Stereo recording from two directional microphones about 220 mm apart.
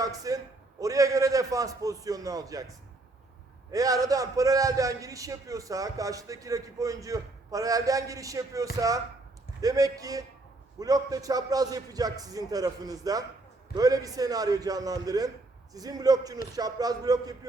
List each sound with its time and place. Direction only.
0.0 s a man's voice: 15° right (ahead or behind)
3.7 s a man's voice: 15° right (ahead or behind)